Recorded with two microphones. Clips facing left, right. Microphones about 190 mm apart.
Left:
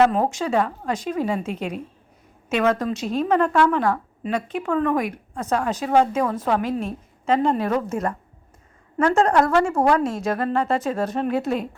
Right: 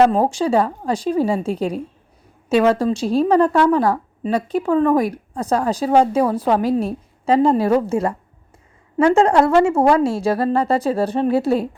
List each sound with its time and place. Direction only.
0.0 s a woman's voice: 30° right (ahead or behind)